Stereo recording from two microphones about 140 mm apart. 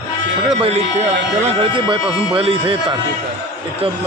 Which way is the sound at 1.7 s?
35° right (ahead or behind).